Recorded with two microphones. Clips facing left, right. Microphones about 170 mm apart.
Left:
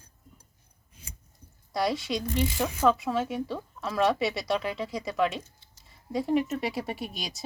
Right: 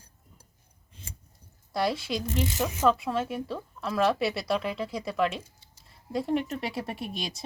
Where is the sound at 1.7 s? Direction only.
Centre (ahead or behind).